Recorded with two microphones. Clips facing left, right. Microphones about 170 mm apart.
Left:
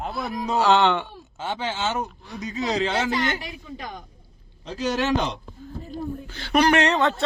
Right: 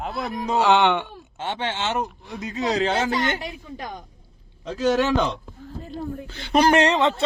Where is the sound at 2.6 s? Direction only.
40° right (ahead or behind).